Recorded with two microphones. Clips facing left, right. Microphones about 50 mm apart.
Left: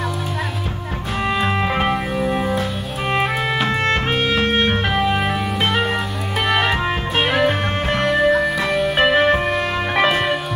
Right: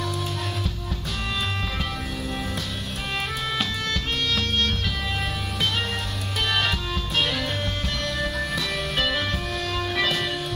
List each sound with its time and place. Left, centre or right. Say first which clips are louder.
1.3 s music: left 11 dB; left
2.2 s music: left 11 dB; left
3.6 s music: left 10 dB; left
8.2 s music: left 13 dB; left
8.9 s music: left 11 dB; left